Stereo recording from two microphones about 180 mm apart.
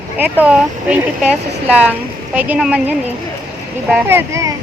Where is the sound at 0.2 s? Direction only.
10° right (ahead or behind).